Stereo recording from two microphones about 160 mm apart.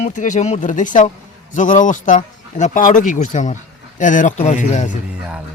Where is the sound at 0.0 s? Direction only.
50° left (ahead or behind).